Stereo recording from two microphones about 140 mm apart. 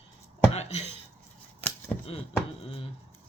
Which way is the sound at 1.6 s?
10° left (ahead or behind).